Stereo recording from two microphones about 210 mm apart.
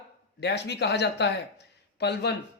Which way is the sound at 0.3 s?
55° left (ahead or behind).